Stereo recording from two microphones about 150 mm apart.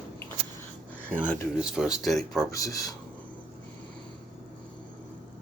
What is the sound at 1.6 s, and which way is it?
Speech, 5° right (ahead or behind).